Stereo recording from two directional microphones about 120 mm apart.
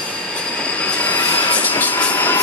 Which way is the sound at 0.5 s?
10° left (ahead or behind).